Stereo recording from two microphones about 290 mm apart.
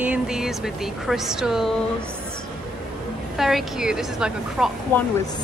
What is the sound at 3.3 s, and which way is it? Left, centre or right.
A woman's voice, centre.